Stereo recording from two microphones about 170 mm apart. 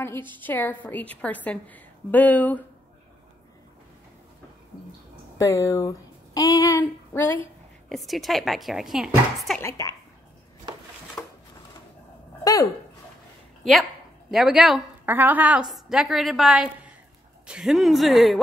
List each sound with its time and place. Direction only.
0.0 s a woman's voice: 15° left (ahead or behind)
5.4 s speech: 20° left (ahead or behind)
7.9 s speech: centre (ahead or behind)
9.6 s a woman's voice: 20° left (ahead or behind)
11.2 s a sound: 5° left (ahead or behind)
14.3 s a woman's voice: centre (ahead or behind)